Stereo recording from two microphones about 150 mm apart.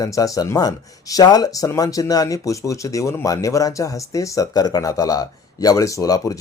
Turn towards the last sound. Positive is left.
turn(degrees=25)  # may be behind; listen again after turning